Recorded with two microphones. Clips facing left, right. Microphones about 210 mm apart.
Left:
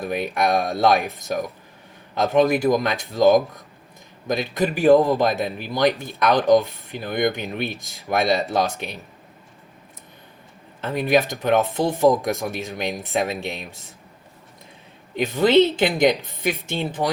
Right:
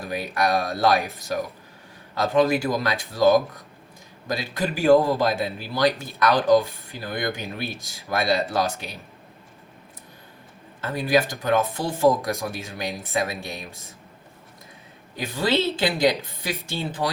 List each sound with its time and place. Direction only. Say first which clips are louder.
0.0 s speech: left 3 dB; 20° left (ahead or behind)
2.1 s a man's voice: left 2 dB; 20° left (ahead or behind)
10.8 s speech: left 2 dB; 20° left (ahead or behind)
15.1 s a man's voice: left 7 dB; 20° left (ahead or behind)